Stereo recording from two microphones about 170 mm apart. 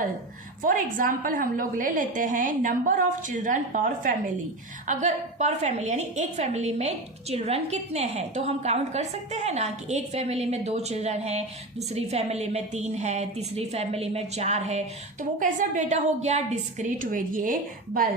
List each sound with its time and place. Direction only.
0.6 s a woman's voice: 55° right (ahead or behind)